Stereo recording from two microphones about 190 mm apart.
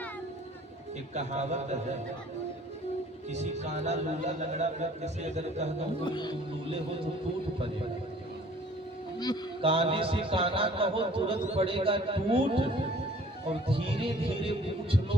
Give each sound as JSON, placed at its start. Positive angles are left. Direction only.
{"t": 1.1, "sound": "speech", "side_deg": -35}
{"t": 3.2, "sound": "speech", "side_deg": -35}
{"t": 6.1, "sound": "speech", "side_deg": 25}
{"t": 9.1, "sound": "speech", "side_deg": 20}
{"t": 9.6, "sound": "a man's voice", "side_deg": -30}